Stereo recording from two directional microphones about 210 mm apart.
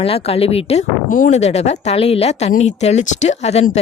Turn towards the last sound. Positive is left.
turn(degrees=30)  # may be behind; listen again after turning